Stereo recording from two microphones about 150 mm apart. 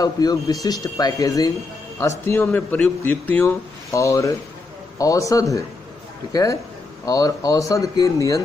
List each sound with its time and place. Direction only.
0.0 s a man's voice: 25° left (ahead or behind)